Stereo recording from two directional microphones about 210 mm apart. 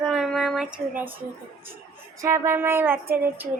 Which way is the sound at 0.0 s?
Centre (ahead or behind).